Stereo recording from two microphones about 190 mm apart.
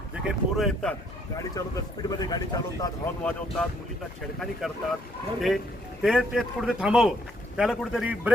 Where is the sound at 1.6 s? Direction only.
20° left (ahead or behind).